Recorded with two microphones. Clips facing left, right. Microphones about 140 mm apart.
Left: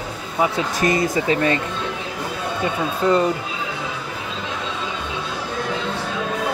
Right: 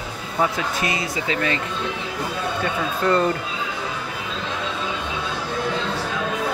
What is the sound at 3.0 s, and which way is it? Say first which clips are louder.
Speech: left 2 dB; 10° left (ahead or behind).